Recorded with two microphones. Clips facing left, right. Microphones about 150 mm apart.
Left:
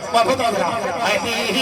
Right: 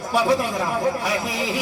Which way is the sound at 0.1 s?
90° left.